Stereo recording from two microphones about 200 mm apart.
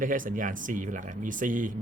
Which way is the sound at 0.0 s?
40° right (ahead or behind).